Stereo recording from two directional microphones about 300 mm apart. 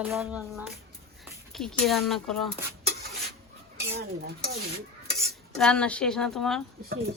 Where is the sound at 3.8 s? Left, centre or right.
Right.